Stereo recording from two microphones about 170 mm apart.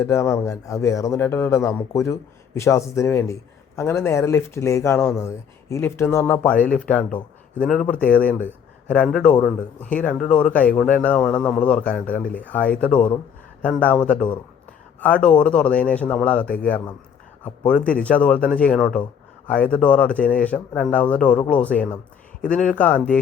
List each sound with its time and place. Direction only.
0.0 s a man's voice: 15° left (ahead or behind)
17.7 s speech: 5° left (ahead or behind)